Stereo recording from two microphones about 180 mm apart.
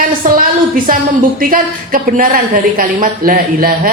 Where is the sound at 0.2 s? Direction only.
50° right (ahead or behind).